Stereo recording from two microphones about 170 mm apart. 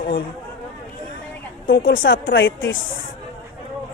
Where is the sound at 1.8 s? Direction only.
55° left (ahead or behind).